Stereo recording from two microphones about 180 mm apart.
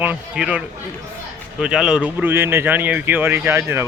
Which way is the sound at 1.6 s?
5° right (ahead or behind).